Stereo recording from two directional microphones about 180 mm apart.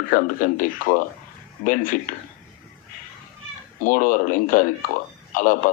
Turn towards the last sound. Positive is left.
turn(degrees=50)  # may be behind; listen again after turning